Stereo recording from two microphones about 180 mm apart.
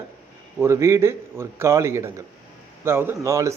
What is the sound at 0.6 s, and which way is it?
A man's voice, 15° right (ahead or behind).